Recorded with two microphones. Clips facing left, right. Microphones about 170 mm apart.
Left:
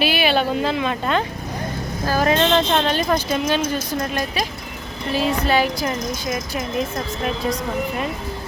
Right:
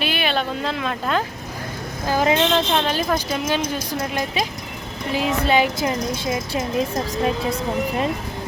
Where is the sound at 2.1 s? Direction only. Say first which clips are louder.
Even; 20° right (ahead or behind).